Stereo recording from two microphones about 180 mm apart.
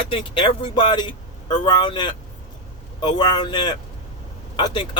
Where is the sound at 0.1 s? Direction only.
30° left (ahead or behind).